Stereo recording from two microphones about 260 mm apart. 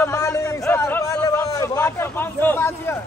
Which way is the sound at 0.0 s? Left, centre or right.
Centre.